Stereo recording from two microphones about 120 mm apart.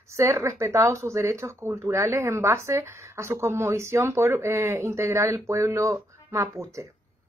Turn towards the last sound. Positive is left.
turn(degrees=-25)  # may be behind; listen again after turning